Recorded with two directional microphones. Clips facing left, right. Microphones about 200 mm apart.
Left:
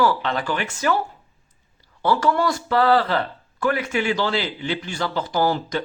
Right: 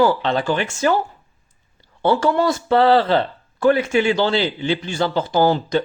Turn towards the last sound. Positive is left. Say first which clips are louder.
# right 5 dB
turn(degrees=-25)  # may be behind; listen again after turning